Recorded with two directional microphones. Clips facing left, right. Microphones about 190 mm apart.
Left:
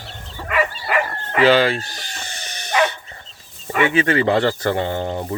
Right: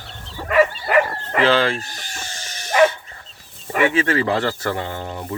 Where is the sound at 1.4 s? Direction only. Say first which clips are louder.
Left 3 dB; 10° left (ahead or behind).